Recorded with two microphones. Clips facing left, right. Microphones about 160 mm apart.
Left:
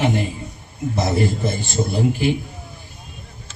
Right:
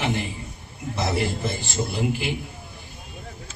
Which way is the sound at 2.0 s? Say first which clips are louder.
Left 8 dB; 35° left (ahead or behind).